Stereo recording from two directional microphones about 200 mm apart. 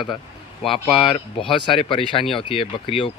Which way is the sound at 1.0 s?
25° left (ahead or behind).